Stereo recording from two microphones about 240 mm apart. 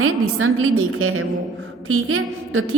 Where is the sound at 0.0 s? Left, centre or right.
Right.